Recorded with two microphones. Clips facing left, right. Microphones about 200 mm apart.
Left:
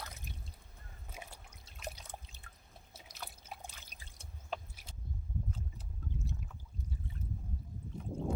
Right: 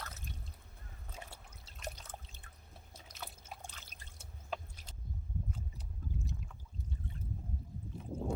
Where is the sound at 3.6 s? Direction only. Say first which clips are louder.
Even; 10° left (ahead or behind).